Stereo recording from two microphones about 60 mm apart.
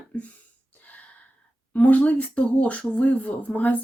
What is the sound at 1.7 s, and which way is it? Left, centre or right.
Speech, left.